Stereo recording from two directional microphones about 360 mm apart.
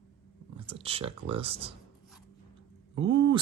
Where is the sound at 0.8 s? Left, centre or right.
Centre.